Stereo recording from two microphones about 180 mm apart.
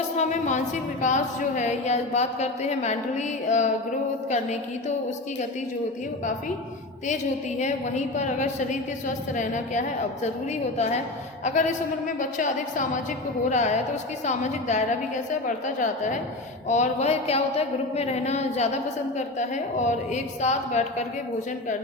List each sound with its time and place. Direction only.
0.2 s speech: 40° left (ahead or behind)
7.6 s a woman's voice: 40° left (ahead or behind)